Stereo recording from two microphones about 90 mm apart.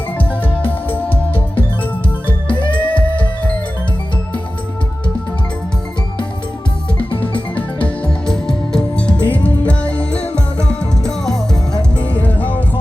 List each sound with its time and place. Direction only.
2.5 s music: 70° left (ahead or behind)
7.2 s music: 15° left (ahead or behind)
11.8 s music: 15° left (ahead or behind)